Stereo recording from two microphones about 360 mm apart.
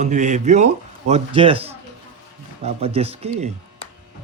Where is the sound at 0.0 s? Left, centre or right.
Centre.